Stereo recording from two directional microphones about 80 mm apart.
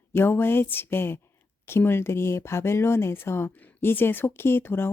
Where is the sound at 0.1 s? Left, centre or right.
Left.